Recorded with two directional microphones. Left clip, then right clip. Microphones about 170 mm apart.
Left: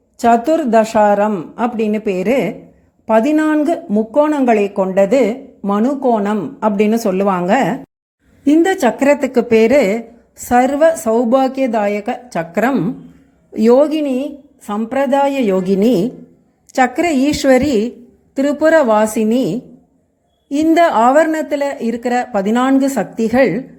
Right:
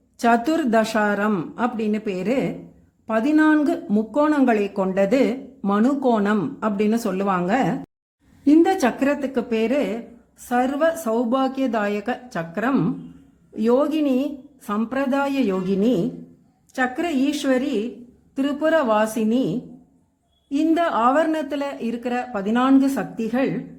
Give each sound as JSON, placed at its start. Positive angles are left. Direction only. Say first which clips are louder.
{"t": 0.2, "sound": "speech", "louder": "left 7 dB", "side_deg": 5}
{"t": 1.5, "sound": "speech", "louder": "left 7 dB", "side_deg": 15}
{"t": 6.6, "sound": "speech", "louder": "left 8 dB", "side_deg": 15}
{"t": 9.2, "sound": "speech", "louder": "left 11 dB", "side_deg": 25}
{"t": 13.5, "sound": "speech", "louder": "left 9 dB", "side_deg": 20}
{"t": 20.7, "sound": "speech", "louder": "left 9 dB", "side_deg": 25}